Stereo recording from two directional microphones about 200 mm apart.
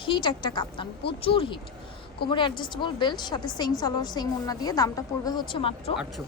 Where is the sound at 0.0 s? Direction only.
25° left (ahead or behind).